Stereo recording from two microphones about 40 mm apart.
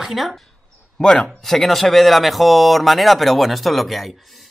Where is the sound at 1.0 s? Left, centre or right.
Centre.